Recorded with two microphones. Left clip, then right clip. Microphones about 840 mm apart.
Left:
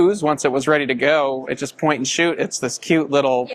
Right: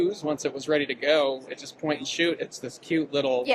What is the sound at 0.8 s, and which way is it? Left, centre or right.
Speech, left.